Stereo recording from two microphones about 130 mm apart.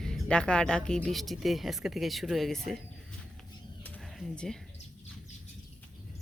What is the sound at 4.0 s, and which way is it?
Speech, centre (ahead or behind).